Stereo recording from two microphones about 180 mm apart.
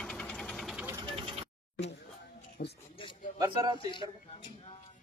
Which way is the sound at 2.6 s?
55° left (ahead or behind).